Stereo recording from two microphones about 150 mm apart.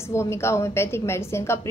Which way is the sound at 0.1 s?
20° left (ahead or behind).